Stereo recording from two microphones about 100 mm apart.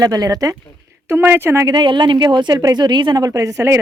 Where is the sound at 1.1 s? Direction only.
20° right (ahead or behind).